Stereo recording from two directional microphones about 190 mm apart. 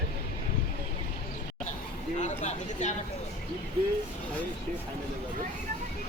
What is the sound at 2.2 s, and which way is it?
Speech, 40° left (ahead or behind).